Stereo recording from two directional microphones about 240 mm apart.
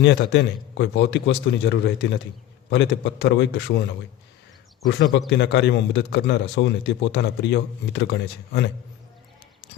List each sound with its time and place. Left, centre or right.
0.0 s a man's voice: left
5.1 s a man's voice: left